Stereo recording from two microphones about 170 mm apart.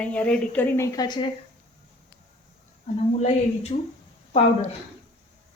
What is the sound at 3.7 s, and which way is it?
Speech, 45° left (ahead or behind).